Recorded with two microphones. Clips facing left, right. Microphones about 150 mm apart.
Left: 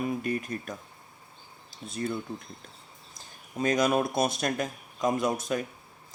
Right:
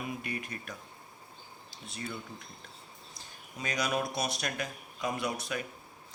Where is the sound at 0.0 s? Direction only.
40° left (ahead or behind).